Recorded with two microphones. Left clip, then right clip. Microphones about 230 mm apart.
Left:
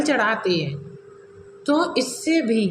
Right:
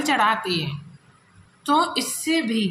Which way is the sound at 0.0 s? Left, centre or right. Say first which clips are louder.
Even; right.